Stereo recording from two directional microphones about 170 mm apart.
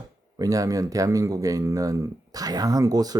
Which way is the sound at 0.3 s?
20° right (ahead or behind).